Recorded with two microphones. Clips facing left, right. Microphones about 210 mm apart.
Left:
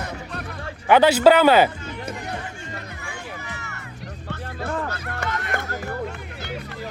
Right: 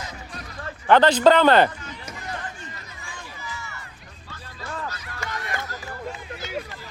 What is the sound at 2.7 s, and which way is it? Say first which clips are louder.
Music: left 6 dB; 65° left (ahead or behind).